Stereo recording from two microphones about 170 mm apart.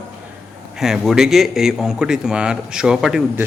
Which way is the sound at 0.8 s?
5° right (ahead or behind).